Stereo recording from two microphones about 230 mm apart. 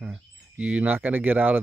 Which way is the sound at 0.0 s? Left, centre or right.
Centre.